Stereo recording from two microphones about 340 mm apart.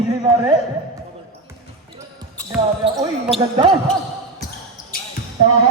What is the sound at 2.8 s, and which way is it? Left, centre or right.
Speech, centre.